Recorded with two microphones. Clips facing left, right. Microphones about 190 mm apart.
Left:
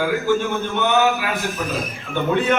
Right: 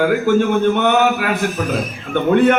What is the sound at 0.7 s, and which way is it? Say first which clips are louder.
A man's voice: right 3 dB; 55° right (ahead or behind).